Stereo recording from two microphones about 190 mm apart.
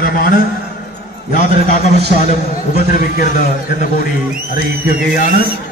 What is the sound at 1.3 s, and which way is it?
A man's voice, 45° left (ahead or behind).